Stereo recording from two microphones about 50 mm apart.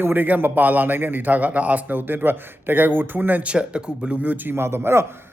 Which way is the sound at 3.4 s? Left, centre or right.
Centre.